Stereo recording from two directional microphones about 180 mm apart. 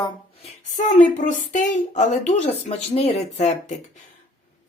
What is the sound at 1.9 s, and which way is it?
Speech, 40° left (ahead or behind).